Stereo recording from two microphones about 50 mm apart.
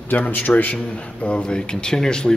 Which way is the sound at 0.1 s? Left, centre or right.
Left.